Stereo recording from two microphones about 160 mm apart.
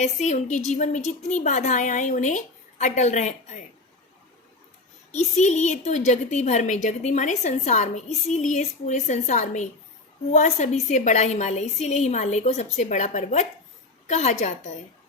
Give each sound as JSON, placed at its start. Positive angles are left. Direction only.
{"t": 0.0, "sound": "a woman's voice", "side_deg": 45}
{"t": 5.1, "sound": "a woman's voice", "side_deg": 45}